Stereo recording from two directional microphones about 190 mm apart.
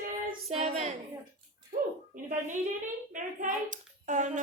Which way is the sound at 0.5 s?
35° right (ahead or behind).